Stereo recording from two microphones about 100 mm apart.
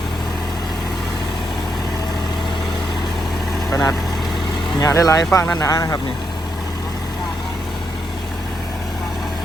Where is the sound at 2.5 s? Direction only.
5° left (ahead or behind).